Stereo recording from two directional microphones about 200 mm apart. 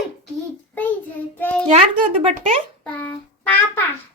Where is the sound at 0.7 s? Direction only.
10° left (ahead or behind).